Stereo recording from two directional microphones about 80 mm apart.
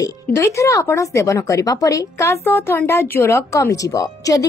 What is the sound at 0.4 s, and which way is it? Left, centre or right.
A woman's voice, left.